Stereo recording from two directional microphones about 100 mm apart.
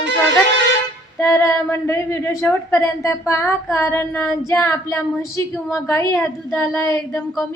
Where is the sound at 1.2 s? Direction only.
30° left (ahead or behind).